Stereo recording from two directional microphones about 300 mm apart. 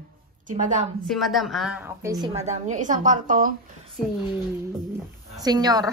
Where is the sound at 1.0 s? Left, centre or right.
Centre; by 3.5 s right.